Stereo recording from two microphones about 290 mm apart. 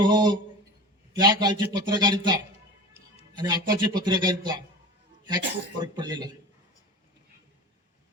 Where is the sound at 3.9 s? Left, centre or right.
Centre.